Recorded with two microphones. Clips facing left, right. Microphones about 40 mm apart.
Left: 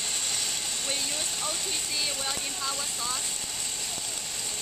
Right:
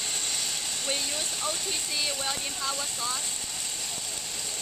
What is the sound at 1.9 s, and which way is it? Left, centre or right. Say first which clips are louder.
Speech: right 1 dB; centre.